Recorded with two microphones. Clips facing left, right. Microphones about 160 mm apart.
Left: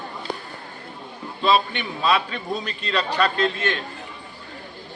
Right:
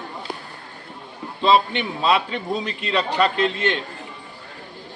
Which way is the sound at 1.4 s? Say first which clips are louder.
Right 3 dB; 25° right (ahead or behind).